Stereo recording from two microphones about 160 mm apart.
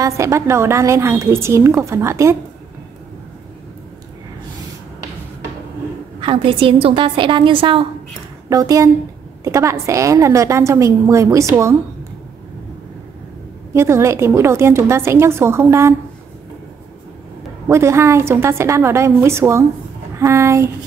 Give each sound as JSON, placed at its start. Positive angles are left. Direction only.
{"t": 0.0, "sound": "a woman's voice", "side_deg": -20}
{"t": 6.2, "sound": "a woman's voice", "side_deg": -35}
{"t": 8.5, "sound": "a woman's voice", "side_deg": -20}
{"t": 13.7, "sound": "a woman's voice", "side_deg": -15}
{"t": 17.6, "sound": "a woman's voice", "side_deg": -15}